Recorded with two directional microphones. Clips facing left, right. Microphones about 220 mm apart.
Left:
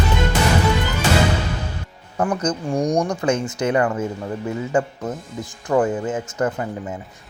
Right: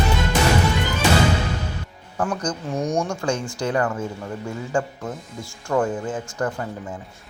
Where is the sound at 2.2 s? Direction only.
20° left (ahead or behind).